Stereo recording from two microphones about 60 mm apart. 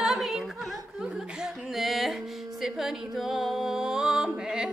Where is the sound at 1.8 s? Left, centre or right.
Centre.